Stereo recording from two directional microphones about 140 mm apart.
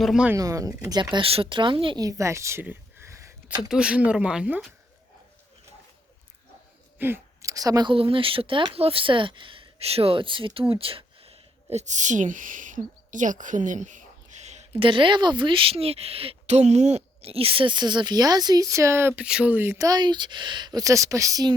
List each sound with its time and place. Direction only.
0.0 s speech: centre (ahead or behind)
0.3 s a woman's voice: 25° right (ahead or behind)
2.0 s a sound: 20° right (ahead or behind)
3.6 s speech: 5° right (ahead or behind)
7.0 s a woman's voice: 20° right (ahead or behind)
7.9 s speech: 40° right (ahead or behind)
14.8 s a woman's voice: 35° right (ahead or behind)